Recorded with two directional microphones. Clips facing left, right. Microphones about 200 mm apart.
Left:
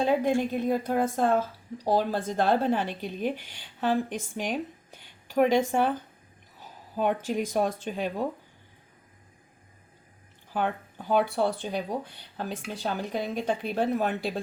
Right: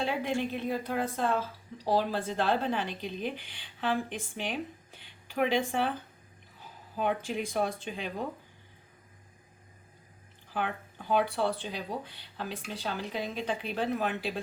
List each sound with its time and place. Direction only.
0.0 s speech: 45° left (ahead or behind)
7.0 s speech: 45° left (ahead or behind)
11.1 s speech: 45° left (ahead or behind)